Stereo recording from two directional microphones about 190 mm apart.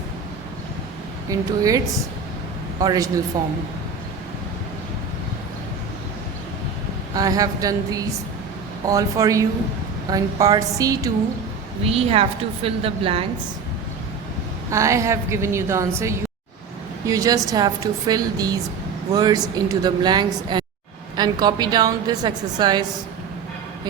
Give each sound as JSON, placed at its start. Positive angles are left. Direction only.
{"t": 1.3, "sound": "a woman's voice", "side_deg": -20}
{"t": 2.8, "sound": "a woman's voice", "side_deg": -20}
{"t": 7.1, "sound": "a woman's voice", "side_deg": -20}
{"t": 11.9, "sound": "a woman's voice", "side_deg": -30}
{"t": 14.7, "sound": "a woman's voice", "side_deg": -15}